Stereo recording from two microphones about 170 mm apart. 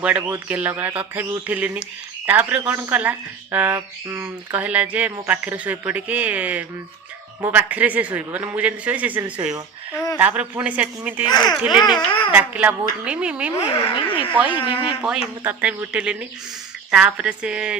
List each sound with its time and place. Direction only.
0.0 s speech: 5° right (ahead or behind)
11.9 s speech: 25° left (ahead or behind)
12.3 s speech: 10° right (ahead or behind)
13.6 s speech: 30° left (ahead or behind)
14.3 s speech: 10° right (ahead or behind)